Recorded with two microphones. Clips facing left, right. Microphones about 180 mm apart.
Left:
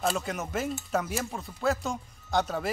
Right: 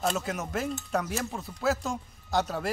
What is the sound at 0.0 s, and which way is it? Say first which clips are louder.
Speech: even; centre (ahead or behind).